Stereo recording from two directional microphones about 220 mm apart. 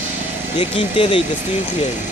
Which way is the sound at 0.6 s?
25° left (ahead or behind).